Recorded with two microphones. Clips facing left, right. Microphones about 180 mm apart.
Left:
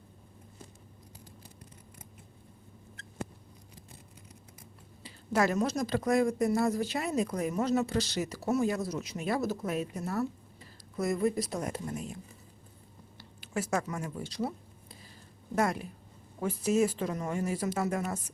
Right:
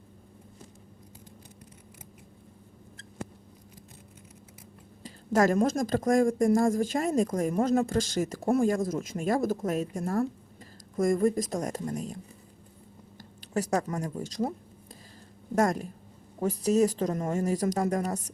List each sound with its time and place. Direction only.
5.0 s speech: 45° right (ahead or behind)
13.1 s a sound: 40° right (ahead or behind)
15.5 s speech: 45° right (ahead or behind)